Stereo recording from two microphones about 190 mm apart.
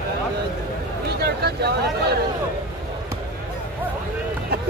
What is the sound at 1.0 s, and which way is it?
Speech, 60° right (ahead or behind).